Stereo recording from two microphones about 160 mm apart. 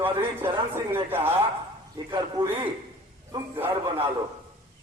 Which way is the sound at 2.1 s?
25° right (ahead or behind).